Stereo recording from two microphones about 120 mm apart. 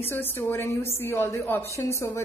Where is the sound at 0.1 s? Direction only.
20° left (ahead or behind).